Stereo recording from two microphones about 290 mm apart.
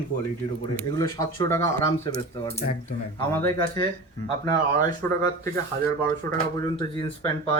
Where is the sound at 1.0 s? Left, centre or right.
Centre.